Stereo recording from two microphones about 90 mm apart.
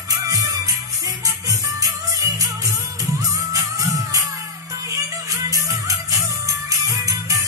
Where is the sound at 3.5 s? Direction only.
40° right (ahead or behind).